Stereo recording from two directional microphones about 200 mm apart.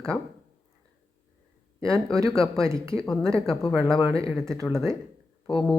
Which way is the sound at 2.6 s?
15° right (ahead or behind).